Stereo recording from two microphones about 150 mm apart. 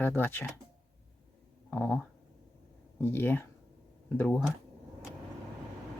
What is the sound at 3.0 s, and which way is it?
Speech, 15° left (ahead or behind).